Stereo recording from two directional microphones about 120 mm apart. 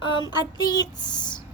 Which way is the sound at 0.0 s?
45° left (ahead or behind).